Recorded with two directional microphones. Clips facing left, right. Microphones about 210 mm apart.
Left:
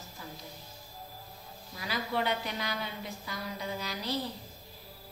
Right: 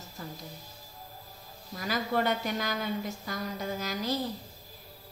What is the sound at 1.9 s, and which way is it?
A woman's voice, 45° right (ahead or behind).